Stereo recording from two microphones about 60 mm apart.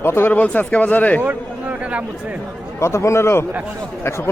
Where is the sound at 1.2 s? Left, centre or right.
Right.